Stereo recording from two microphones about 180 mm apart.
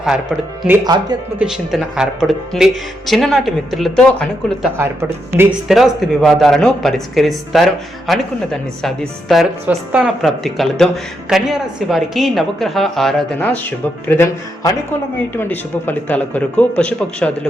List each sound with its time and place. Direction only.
0.0 s speech: centre (ahead or behind)
0.9 s speech: 25° right (ahead or behind)
1.4 s speech: 5° right (ahead or behind)
4.8 s speech: 15° right (ahead or behind)
5.6 s speech: centre (ahead or behind)
14.1 s speech: 15° left (ahead or behind)